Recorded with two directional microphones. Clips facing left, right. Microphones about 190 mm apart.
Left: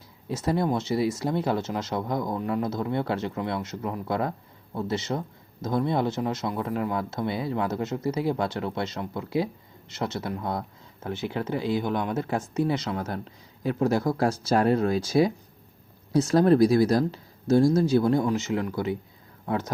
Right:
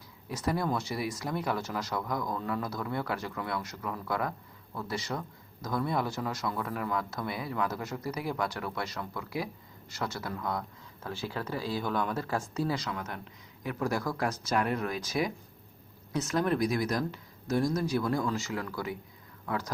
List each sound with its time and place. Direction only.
0.3 s speech: 25° left (ahead or behind)